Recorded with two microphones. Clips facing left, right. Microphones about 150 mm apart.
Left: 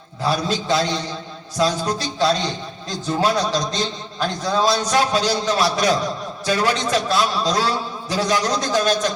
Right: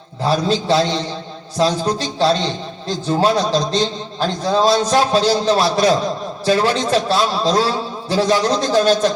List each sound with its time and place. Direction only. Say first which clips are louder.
0.2 s a man's voice: right 4 dB; 35° right (ahead or behind)